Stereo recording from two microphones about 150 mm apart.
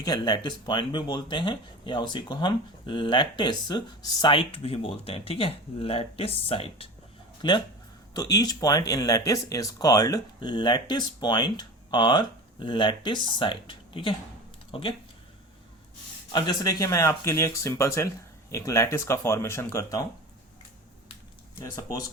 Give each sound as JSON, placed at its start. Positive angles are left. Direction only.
{"t": 0.0, "sound": "speech", "side_deg": 30}
{"t": 16.3, "sound": "speech", "side_deg": 25}
{"t": 21.6, "sound": "speech", "side_deg": 20}